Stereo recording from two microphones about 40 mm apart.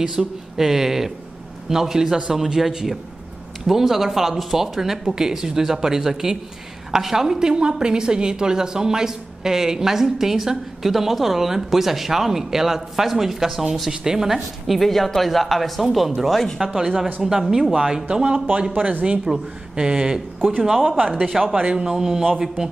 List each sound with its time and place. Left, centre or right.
0.2 s a woman's voice: centre
18.1 s speech: right
20.6 s a woman's voice: centre
21.5 s speech: right
21.9 s a woman's voice: centre